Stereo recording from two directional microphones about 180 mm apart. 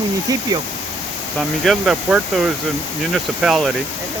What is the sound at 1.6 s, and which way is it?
Speech, centre (ahead or behind).